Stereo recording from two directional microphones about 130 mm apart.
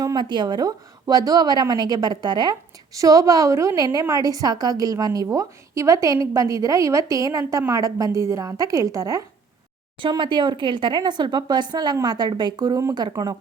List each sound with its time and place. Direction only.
0.0 s a woman's voice: 35° right (ahead or behind)
10.0 s a woman's voice: 35° right (ahead or behind)